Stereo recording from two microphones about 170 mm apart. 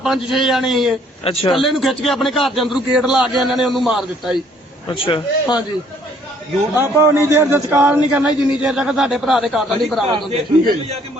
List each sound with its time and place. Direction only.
0.0 s a man's voice: centre (ahead or behind)
1.2 s a man's voice: 35° left (ahead or behind)
1.5 s a man's voice: centre (ahead or behind)
4.9 s a man's voice: 30° left (ahead or behind)
6.7 s a man's voice: 15° right (ahead or behind); by 10.0 s centre (ahead or behind)